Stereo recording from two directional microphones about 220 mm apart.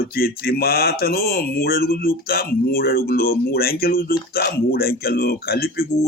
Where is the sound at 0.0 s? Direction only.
45° left (ahead or behind).